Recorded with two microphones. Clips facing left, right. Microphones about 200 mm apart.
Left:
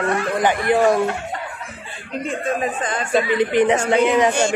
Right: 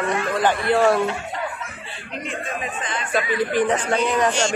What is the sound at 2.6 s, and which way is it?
Speech, 45° left (ahead or behind).